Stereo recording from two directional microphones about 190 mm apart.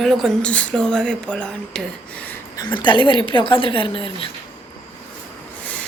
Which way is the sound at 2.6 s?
25° left (ahead or behind).